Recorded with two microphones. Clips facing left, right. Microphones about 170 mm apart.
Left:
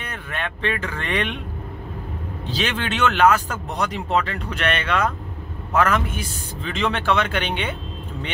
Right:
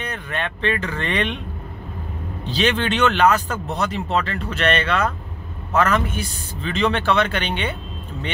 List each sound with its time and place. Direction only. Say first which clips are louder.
0.0 s speech: right 3 dB; 5° left (ahead or behind)
2.4 s speech: right 5 dB; 10° left (ahead or behind)